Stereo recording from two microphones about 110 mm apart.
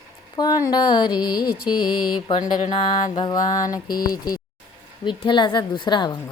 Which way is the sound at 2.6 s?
55° left (ahead or behind).